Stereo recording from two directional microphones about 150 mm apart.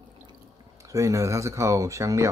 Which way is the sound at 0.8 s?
20° right (ahead or behind).